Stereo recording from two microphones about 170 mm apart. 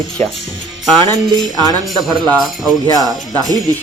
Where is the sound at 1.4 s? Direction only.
25° right (ahead or behind).